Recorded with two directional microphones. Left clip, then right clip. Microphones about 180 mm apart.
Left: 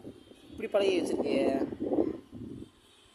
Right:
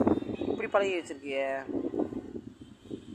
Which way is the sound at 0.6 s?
25° left (ahead or behind).